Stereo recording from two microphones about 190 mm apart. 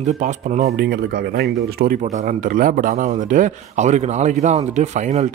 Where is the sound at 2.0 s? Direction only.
40° right (ahead or behind).